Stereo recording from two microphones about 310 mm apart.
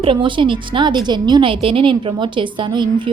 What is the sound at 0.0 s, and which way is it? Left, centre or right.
A woman's voice, centre.